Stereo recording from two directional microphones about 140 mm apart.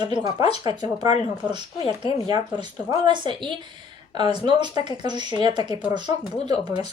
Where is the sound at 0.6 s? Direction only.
30° right (ahead or behind).